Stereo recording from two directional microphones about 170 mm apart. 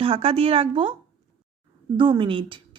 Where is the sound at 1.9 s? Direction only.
30° right (ahead or behind).